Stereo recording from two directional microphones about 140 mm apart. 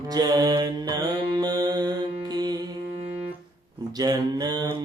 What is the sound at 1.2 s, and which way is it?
Music, 30° right (ahead or behind).